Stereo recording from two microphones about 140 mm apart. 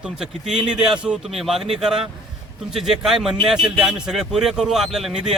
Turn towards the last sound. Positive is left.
turn(degrees=0)  # may be behind; listen again after turning